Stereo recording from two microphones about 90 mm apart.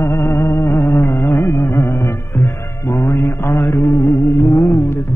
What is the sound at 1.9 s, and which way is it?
Music, 45° left (ahead or behind).